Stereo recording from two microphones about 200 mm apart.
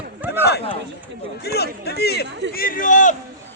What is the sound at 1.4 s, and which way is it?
Speech, 55° left (ahead or behind).